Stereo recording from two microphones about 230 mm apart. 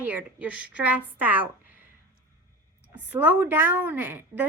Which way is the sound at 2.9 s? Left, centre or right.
Centre.